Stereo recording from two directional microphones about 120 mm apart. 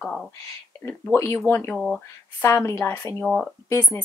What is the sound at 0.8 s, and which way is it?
Speech, 20° left (ahead or behind).